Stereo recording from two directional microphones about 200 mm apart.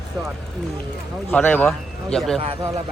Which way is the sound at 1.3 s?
10° left (ahead or behind).